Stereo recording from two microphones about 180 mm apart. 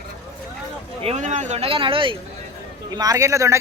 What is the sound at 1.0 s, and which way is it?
Speech, 40° right (ahead or behind).